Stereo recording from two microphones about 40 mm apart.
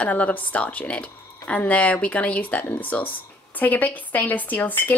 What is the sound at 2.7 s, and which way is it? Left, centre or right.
Speech, left.